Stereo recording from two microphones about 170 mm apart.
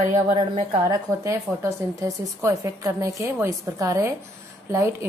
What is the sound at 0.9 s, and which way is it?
A woman's voice, 15° right (ahead or behind).